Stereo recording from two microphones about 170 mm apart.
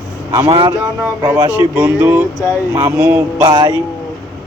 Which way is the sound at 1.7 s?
10° right (ahead or behind).